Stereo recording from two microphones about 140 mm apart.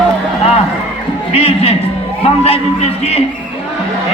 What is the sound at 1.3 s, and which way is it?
A man's voice, 45° left (ahead or behind).